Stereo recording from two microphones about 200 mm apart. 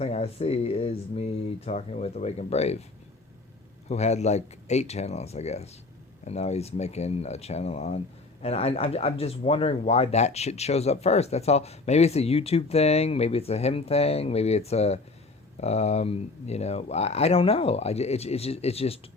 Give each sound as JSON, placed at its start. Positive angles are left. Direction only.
{"t": 0.0, "sound": "speech", "side_deg": 30}
{"t": 3.8, "sound": "speech", "side_deg": 35}